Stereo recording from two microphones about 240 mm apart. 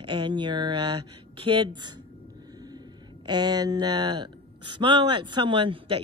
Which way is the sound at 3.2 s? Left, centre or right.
Centre.